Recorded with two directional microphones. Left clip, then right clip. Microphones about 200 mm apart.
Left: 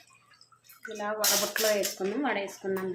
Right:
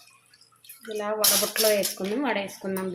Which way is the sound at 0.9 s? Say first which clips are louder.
Right 4 dB; 35° right (ahead or behind).